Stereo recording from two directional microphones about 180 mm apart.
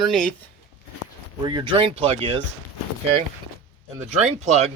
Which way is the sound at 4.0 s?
40° right (ahead or behind).